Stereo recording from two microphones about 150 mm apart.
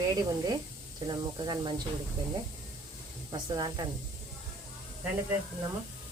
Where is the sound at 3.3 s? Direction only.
30° right (ahead or behind).